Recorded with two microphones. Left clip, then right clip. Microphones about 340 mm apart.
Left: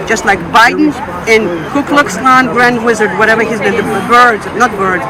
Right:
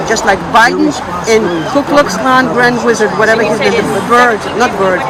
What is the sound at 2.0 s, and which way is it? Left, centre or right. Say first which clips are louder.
Speech: left 2 dB; centre.